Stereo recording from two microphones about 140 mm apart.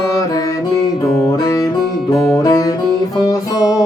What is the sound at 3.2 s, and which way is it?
Music, 25° left (ahead or behind).